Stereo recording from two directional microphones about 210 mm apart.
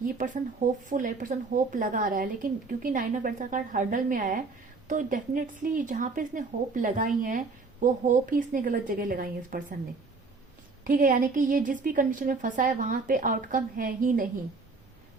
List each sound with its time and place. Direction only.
0.9 s speech: 40° right (ahead or behind)
10.8 s speech: 40° right (ahead or behind)